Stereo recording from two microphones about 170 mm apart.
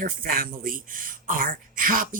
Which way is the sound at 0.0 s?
55° right (ahead or behind).